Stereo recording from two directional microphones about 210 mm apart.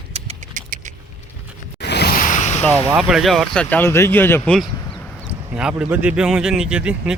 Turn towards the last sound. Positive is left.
turn(degrees=-5)  # may be behind; listen again after turning